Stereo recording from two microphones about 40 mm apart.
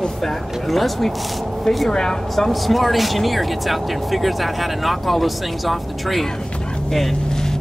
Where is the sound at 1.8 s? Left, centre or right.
Centre.